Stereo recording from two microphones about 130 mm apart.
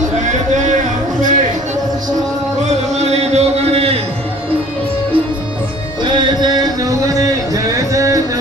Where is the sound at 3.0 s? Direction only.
55° right (ahead or behind).